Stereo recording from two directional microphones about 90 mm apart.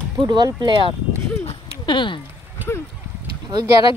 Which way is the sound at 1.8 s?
60° left (ahead or behind).